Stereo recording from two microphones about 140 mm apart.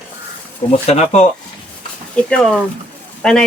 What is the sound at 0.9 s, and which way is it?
Speech, 50° left (ahead or behind).